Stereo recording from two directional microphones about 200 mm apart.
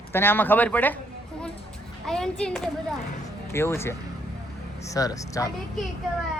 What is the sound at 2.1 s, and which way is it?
A child's voice, 5° left (ahead or behind).